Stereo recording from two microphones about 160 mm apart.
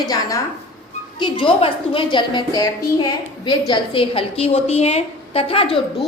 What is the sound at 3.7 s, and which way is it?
A woman's voice, 35° left (ahead or behind).